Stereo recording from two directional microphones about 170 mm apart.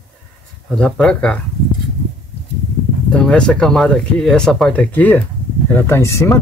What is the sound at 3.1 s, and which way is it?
Speech, 5° left (ahead or behind).